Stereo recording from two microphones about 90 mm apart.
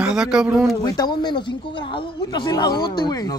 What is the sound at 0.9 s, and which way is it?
Speech, 50° left (ahead or behind).